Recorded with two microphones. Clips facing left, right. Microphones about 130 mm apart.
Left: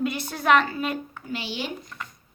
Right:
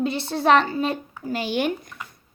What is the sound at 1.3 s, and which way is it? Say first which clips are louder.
Speech: right 7 dB; 50° right (ahead or behind).